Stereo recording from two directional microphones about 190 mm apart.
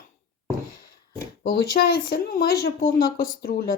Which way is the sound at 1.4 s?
55° left (ahead or behind).